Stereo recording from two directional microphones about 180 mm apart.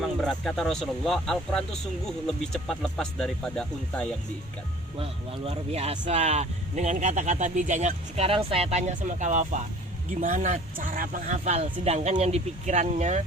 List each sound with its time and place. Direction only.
0.0 s speech: centre (ahead or behind)
5.5 s speech: 35° right (ahead or behind)